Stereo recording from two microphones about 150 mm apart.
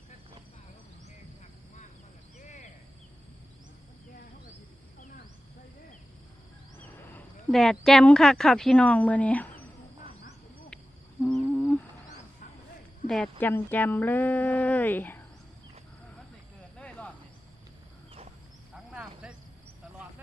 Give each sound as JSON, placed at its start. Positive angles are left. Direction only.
{"t": 2.4, "sound": "a sound", "side_deg": 55}
{"t": 6.7, "sound": "a sound", "side_deg": 10}
{"t": 7.5, "sound": "a woman's voice", "side_deg": 0}
{"t": 10.7, "sound": "hoot", "side_deg": 5}
{"t": 11.3, "sound": "humming", "side_deg": 5}
{"t": 13.1, "sound": "speech", "side_deg": 5}
{"t": 16.7, "sound": "cricket", "side_deg": 10}
{"t": 18.7, "sound": "cricket", "side_deg": -5}